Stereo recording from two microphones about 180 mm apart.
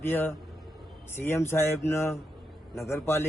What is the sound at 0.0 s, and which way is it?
A man's voice, 10° left (ahead or behind).